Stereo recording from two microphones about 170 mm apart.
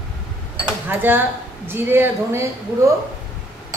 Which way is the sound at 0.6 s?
10° right (ahead or behind).